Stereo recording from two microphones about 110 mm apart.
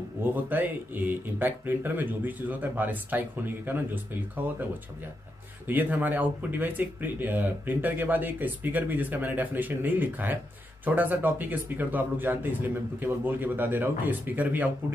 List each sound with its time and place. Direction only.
0.2 s speech: 15° right (ahead or behind)
5.7 s speech: 15° right (ahead or behind)